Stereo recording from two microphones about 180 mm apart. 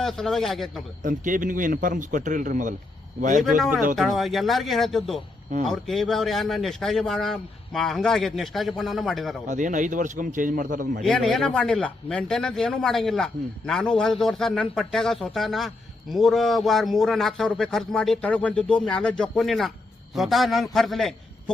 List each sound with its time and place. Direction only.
0.0 s a man's voice: centre (ahead or behind)
1.0 s speech: 50° right (ahead or behind)
3.9 s a man's voice: centre (ahead or behind)
9.5 s speech: 45° right (ahead or behind)
11.0 s a man's voice: centre (ahead or behind)